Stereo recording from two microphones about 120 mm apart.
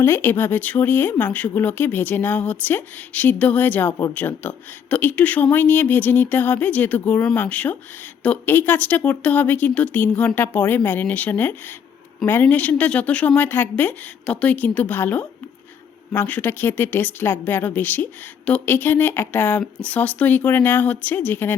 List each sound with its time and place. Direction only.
0.0 s speech: 20° left (ahead or behind)